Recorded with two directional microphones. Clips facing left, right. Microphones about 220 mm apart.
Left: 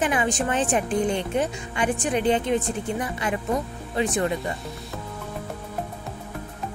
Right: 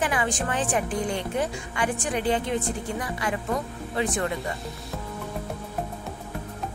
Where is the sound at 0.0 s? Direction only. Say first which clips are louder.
Left 3 dB; 20° left (ahead or behind).